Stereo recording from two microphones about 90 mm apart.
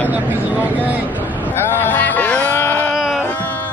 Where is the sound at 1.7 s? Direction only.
20° left (ahead or behind).